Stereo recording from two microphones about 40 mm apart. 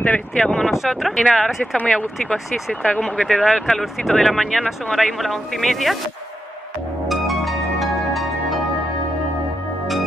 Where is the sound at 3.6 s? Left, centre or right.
Centre.